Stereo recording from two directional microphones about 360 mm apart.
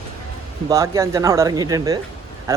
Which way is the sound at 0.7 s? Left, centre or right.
Centre.